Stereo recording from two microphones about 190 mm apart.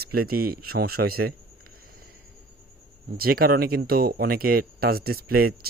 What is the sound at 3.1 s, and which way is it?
Speech, 50° right (ahead or behind).